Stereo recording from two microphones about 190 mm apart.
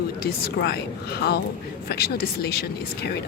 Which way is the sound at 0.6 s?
55° left (ahead or behind).